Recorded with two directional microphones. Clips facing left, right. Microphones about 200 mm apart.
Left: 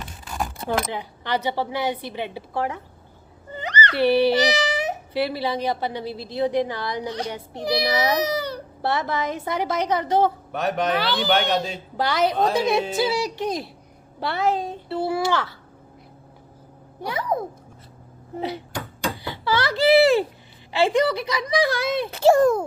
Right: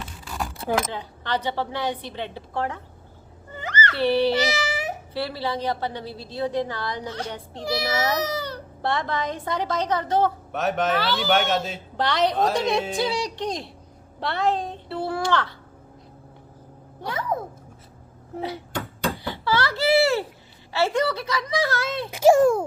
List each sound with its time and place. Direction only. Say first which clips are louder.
0.9 s a woman's voice: left 2 dB; 15° left (ahead or behind)
10.5 s a woman's voice: even; centre (ahead or behind)
10.9 s a woman's voice: left 1 dB; 15° left (ahead or behind)
11.3 s a woman's voice: even; centre (ahead or behind)
17.0 s a woman's voice: left 2 dB; 15° left (ahead or behind)
18.3 s a woman's voice: left 2 dB; 15° left (ahead or behind)
19.2 s a sound: left 2 dB; 15° left (ahead or behind)
20.7 s a woman's voice: left 3 dB; 15° left (ahead or behind)
22.1 s a child's voice: right 1 dB; 10° right (ahead or behind)